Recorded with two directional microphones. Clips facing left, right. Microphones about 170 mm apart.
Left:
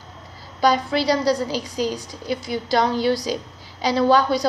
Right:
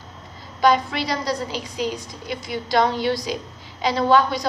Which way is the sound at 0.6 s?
35° left (ahead or behind).